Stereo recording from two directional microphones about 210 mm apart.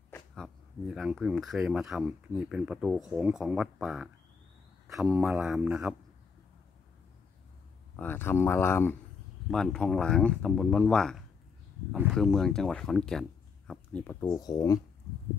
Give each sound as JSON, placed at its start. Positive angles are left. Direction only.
{"t": 0.1, "sound": "speech", "side_deg": 0}
{"t": 7.9, "sound": "speech", "side_deg": 10}
{"t": 14.2, "sound": "speech", "side_deg": 20}